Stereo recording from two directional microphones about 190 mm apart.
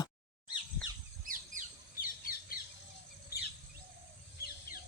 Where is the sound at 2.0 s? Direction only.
50° left (ahead or behind).